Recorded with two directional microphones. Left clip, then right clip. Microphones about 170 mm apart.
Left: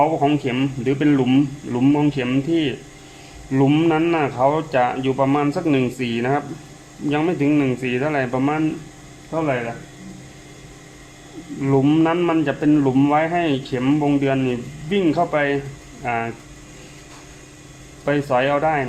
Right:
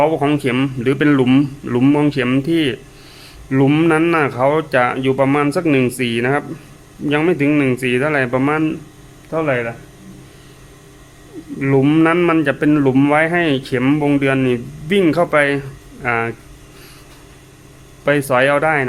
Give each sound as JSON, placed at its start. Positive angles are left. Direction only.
{"t": 0.0, "sound": "speech", "side_deg": -45}
{"t": 11.6, "sound": "speech", "side_deg": -45}
{"t": 18.0, "sound": "speech", "side_deg": -40}